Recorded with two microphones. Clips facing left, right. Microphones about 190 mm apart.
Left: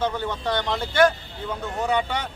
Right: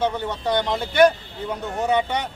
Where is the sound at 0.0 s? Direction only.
15° right (ahead or behind).